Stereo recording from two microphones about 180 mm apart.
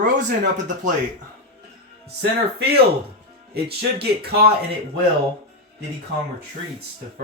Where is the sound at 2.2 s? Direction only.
60° right (ahead or behind).